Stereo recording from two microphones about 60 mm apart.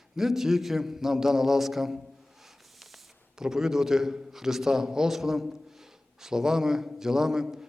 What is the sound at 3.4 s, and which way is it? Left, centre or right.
A man's voice, centre.